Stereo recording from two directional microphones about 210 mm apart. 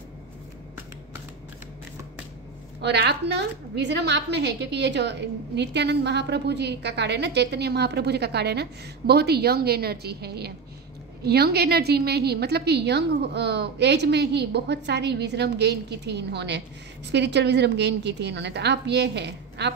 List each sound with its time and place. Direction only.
2.8 s a woman's voice: 55° right (ahead or behind)